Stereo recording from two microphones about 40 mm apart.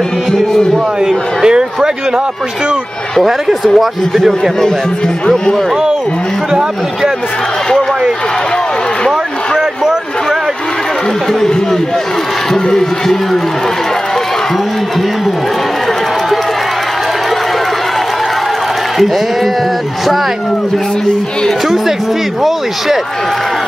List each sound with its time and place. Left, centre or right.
1.0 s a man's voice: centre
3.2 s a man's voice: centre